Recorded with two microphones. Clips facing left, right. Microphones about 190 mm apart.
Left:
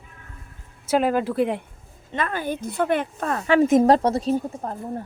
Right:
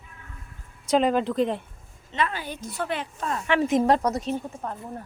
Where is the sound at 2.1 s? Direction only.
50° left (ahead or behind).